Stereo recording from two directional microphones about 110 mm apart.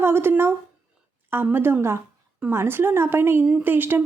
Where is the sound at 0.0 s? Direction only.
20° right (ahead or behind).